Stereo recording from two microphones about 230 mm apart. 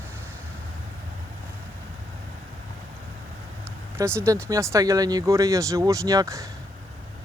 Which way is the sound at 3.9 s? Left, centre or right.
Centre.